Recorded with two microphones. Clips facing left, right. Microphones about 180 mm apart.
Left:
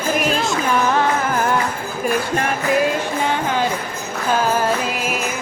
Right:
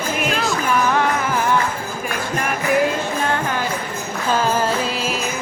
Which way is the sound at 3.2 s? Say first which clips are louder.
Left 4 dB; 20° left (ahead or behind).